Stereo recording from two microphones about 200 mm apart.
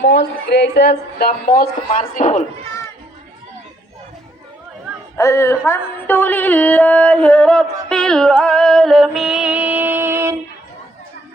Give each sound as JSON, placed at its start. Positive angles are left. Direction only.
{"t": 0.0, "sound": "speech", "side_deg": 60}
{"t": 5.1, "sound": "mantra", "side_deg": 15}